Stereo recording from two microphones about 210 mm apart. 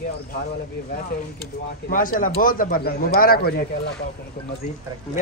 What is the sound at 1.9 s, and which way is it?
Speech, 40° left (ahead or behind).